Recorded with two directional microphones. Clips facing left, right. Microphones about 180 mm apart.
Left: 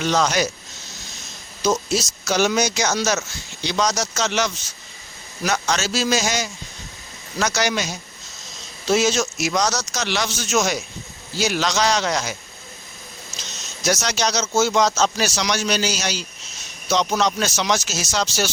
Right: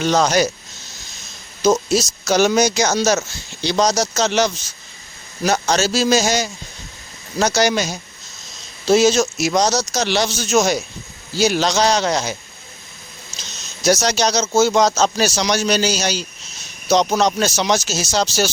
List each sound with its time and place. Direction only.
0.0 s speech: 40° right (ahead or behind)
1.6 s speech: 40° right (ahead or behind)
13.8 s speech: 35° right (ahead or behind)